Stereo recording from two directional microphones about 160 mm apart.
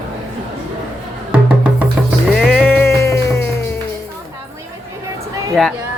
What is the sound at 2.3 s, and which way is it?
Music, 5° left (ahead or behind).